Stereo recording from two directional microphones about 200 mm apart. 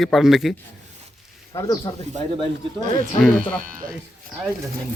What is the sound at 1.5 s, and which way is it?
Speech, 15° left (ahead or behind).